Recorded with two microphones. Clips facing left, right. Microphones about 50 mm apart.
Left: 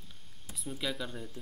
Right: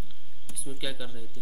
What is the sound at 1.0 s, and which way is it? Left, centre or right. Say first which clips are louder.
Speech: left 1 dB; centre.